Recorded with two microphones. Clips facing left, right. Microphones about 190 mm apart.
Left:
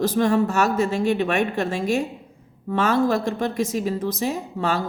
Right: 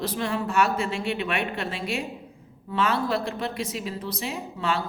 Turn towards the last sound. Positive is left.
turn(degrees=45)  # may be behind; listen again after turning